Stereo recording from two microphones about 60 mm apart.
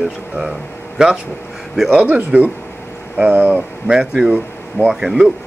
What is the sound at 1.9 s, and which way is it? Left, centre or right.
Speech, right.